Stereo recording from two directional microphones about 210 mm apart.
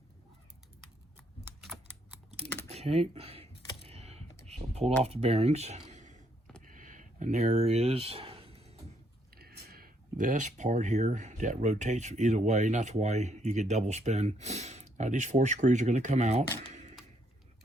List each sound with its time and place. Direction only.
1.5 s typing: 5° right (ahead or behind)
2.6 s a sound: 30° right (ahead or behind)
3.8 s computer keyboard: 30° right (ahead or behind)
4.4 s typing: 30° right (ahead or behind)
5.0 s speech: 30° right (ahead or behind)
6.6 s a sound: 40° right (ahead or behind)
9.3 s speech: 45° right (ahead or behind)